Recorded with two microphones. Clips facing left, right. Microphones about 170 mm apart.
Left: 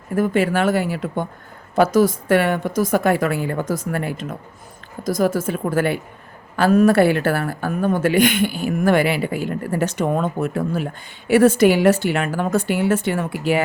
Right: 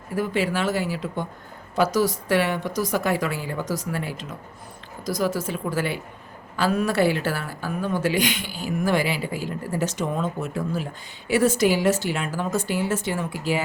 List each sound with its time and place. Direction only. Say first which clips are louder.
0.2 s a woman's voice: left 6 dB; 55° left (ahead or behind)